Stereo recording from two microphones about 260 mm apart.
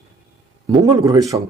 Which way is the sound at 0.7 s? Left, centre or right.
Centre.